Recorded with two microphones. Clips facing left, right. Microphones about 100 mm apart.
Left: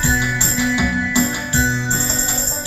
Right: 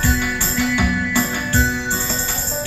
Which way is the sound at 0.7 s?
15° left (ahead or behind).